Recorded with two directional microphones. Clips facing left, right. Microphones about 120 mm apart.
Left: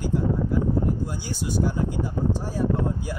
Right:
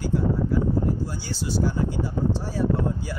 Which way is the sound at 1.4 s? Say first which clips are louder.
Even; 50° left (ahead or behind).